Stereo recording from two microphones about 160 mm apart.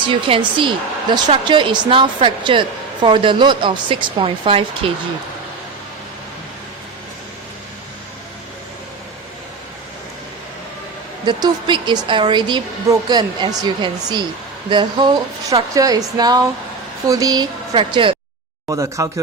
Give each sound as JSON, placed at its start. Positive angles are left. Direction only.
{"t": 0.1, "sound": "a woman's voice", "side_deg": -30}
{"t": 11.3, "sound": "a woman's voice", "side_deg": -25}
{"t": 18.7, "sound": "a woman's voice", "side_deg": -20}